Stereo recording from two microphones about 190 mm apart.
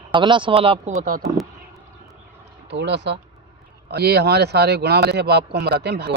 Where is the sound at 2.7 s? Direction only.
65° right (ahead or behind).